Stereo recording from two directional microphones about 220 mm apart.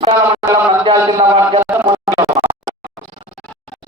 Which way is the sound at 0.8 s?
20° right (ahead or behind).